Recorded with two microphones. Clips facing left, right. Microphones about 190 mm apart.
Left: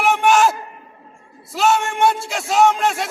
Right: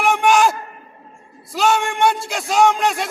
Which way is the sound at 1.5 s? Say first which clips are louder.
Even; 5° left (ahead or behind).